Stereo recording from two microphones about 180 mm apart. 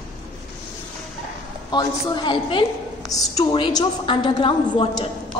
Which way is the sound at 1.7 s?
25° left (ahead or behind).